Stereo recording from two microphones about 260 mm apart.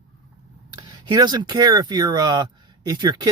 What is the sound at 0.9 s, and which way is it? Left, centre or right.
Speech, centre.